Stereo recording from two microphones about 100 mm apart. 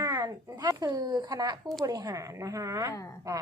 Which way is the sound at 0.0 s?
40° right (ahead or behind).